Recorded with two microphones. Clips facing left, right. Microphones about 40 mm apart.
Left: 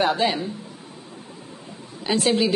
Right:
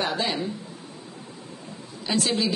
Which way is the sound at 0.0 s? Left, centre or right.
Centre.